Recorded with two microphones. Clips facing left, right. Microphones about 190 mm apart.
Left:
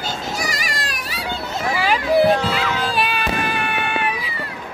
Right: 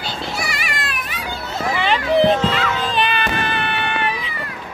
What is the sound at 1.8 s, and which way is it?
Music, 5° left (ahead or behind).